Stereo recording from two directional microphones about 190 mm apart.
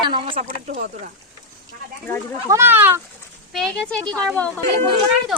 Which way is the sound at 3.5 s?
5° left (ahead or behind).